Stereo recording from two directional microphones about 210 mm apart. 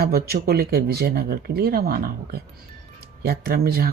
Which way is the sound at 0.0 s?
45° right (ahead or behind).